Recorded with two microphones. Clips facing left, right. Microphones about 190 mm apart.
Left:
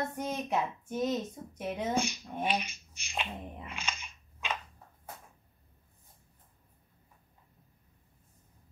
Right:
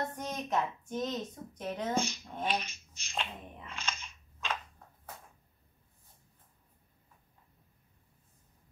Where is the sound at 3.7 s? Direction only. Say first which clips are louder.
Left 1 dB; 15° left (ahead or behind).